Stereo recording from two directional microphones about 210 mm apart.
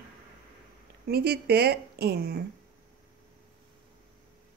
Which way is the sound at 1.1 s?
50° right (ahead or behind).